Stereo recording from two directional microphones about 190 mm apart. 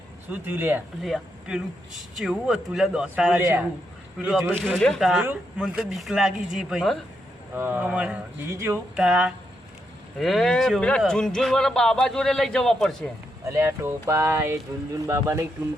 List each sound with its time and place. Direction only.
0.3 s speech: 10° right (ahead or behind)
4.6 s speech: 5° left (ahead or behind)
7.5 s speech: 10° right (ahead or behind)
9.0 s speech: 5° right (ahead or behind)
13.4 s speech: 15° right (ahead or behind)